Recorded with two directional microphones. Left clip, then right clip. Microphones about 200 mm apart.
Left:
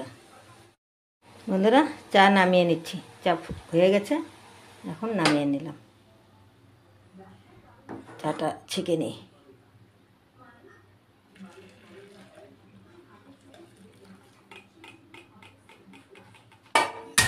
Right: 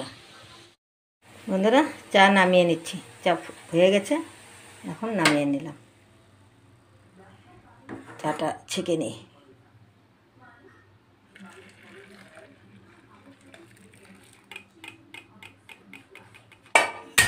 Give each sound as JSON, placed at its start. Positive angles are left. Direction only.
{"t": 1.5, "sound": "a woman's voice", "side_deg": 0}
{"t": 8.2, "sound": "a woman's voice", "side_deg": -5}